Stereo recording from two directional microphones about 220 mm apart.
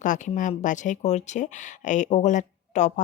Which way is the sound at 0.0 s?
35° left (ahead or behind).